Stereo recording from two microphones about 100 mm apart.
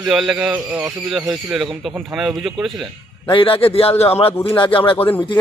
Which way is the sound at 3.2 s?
60° left (ahead or behind).